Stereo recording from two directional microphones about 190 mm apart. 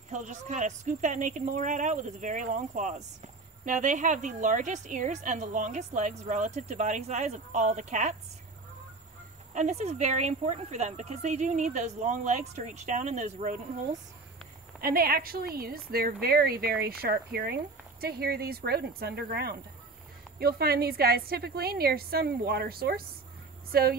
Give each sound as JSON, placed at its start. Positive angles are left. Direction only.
{"t": 0.1, "sound": "a woman's voice", "side_deg": -40}
{"t": 9.5, "sound": "a woman's voice", "side_deg": -40}
{"t": 14.8, "sound": "a woman's voice", "side_deg": -50}